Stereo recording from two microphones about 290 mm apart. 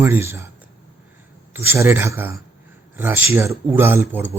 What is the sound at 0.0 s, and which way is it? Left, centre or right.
Speech, centre.